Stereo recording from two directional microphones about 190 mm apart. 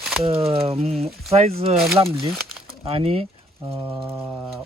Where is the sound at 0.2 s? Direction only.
30° right (ahead or behind).